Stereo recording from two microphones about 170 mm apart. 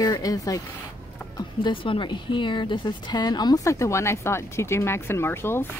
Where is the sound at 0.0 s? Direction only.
20° left (ahead or behind).